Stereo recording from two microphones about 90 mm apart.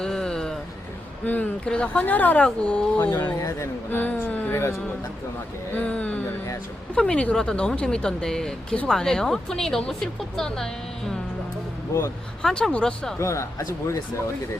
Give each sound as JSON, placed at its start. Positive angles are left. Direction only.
{"t": 0.0, "sound": "a sound", "side_deg": 5}
{"t": 1.2, "sound": "speech", "side_deg": 20}
{"t": 3.4, "sound": "speech", "side_deg": 30}
{"t": 5.7, "sound": "speech", "side_deg": 15}
{"t": 12.4, "sound": "speech", "side_deg": 5}
{"t": 13.1, "sound": "speech", "side_deg": 35}